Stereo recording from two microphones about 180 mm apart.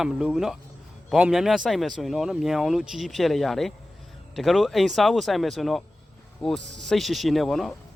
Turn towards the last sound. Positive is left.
turn(degrees=0)  # may be behind; listen again after turning